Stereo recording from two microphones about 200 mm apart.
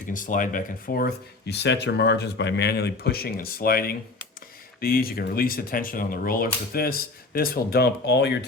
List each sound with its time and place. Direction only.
0.0 s speech: 40° left (ahead or behind); by 8.4 s 55° left (ahead or behind)